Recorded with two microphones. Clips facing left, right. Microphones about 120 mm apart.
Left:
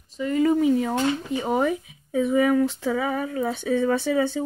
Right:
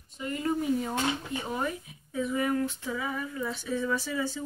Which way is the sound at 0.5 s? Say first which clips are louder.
Left 5 dB; 90° left.